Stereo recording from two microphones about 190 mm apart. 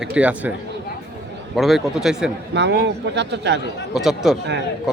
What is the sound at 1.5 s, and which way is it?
Speech, centre (ahead or behind).